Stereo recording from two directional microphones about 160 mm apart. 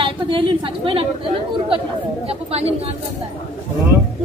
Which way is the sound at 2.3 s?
40° right (ahead or behind).